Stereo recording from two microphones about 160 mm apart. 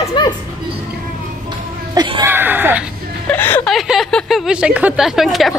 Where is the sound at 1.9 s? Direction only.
25° right (ahead or behind).